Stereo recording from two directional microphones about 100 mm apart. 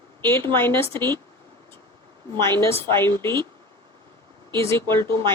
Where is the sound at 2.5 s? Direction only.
25° left (ahead or behind).